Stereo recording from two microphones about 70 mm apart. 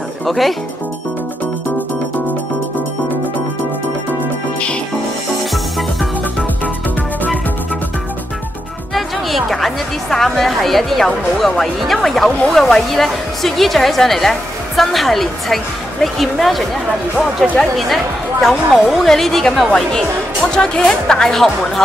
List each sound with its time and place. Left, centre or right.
0.2 s speech: centre
5.5 s music: centre
8.9 s a woman's voice: centre